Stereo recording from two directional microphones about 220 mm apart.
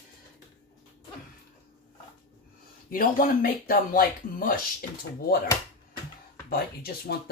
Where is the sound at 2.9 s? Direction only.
40° left (ahead or behind).